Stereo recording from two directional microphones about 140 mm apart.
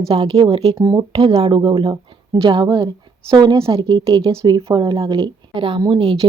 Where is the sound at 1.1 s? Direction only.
40° right (ahead or behind).